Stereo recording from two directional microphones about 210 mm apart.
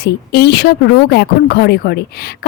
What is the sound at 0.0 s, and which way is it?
Speech, 50° left (ahead or behind).